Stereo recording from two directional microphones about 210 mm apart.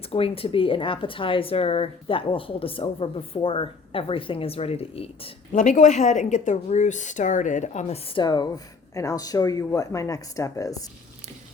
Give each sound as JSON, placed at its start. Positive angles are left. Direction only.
{"t": 0.1, "sound": "speech", "side_deg": 25}